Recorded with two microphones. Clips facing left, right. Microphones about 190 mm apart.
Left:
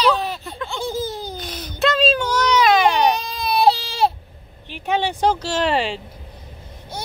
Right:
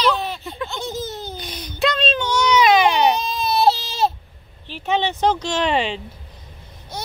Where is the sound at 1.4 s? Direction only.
5° left (ahead or behind).